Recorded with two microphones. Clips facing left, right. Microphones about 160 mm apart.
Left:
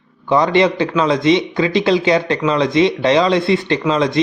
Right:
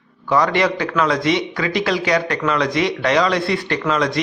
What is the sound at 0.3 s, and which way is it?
Speech, 25° left (ahead or behind).